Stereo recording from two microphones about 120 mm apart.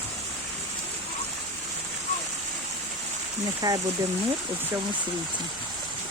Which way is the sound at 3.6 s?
30° right (ahead or behind).